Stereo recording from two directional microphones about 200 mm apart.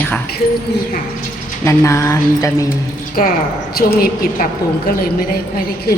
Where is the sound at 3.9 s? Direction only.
45° left (ahead or behind).